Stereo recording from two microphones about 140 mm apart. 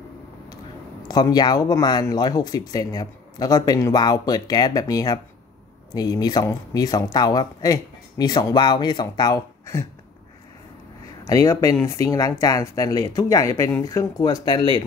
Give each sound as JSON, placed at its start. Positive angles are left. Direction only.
{"t": 1.0, "sound": "speech", "side_deg": 30}
{"t": 11.2, "sound": "speech", "side_deg": 25}